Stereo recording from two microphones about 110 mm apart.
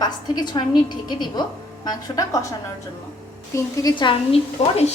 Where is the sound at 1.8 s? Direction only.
35° left (ahead or behind).